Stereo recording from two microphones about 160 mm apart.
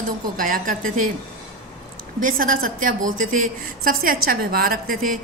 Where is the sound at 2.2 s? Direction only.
60° right (ahead or behind).